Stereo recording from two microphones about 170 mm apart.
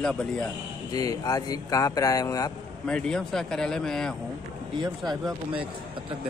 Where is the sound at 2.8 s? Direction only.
5° left (ahead or behind).